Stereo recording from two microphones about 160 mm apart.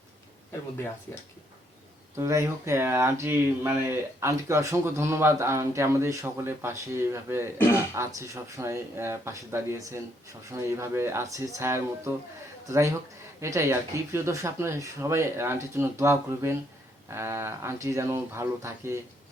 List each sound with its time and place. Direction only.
2.1 s speech: 20° right (ahead or behind)